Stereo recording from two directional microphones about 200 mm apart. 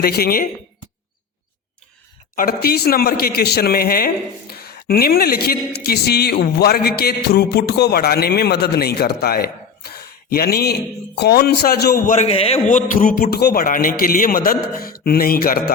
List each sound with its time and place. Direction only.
0.0 s speech: 50° left (ahead or behind)
2.3 s speech: 45° left (ahead or behind)